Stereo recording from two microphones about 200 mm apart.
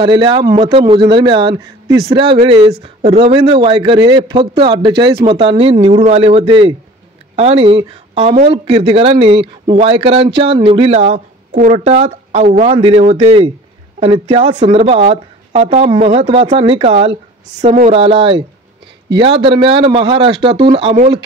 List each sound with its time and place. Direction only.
0.0 s speech: 25° right (ahead or behind)